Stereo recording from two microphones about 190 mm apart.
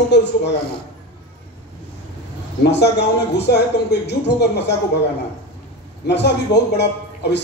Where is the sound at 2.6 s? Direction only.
60° left (ahead or behind).